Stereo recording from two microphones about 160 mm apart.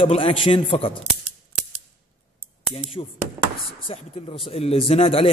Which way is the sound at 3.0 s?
35° left (ahead or behind).